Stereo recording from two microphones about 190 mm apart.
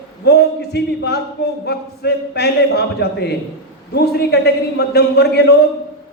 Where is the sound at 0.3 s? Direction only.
60° left (ahead or behind).